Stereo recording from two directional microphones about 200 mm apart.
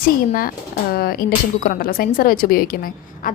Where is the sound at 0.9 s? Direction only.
50° left (ahead or behind).